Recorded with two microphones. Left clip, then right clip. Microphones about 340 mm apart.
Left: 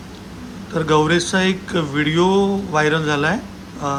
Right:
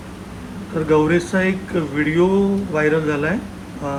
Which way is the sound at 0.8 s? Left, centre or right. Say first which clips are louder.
Even; centre.